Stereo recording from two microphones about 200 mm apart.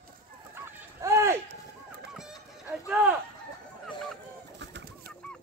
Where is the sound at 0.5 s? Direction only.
15° right (ahead or behind).